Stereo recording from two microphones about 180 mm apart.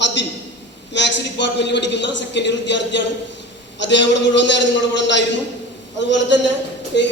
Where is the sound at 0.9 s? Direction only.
75° left (ahead or behind).